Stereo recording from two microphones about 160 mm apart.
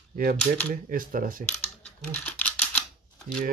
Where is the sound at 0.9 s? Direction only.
60° right (ahead or behind).